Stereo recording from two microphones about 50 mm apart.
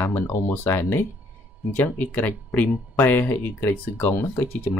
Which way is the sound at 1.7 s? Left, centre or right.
Left.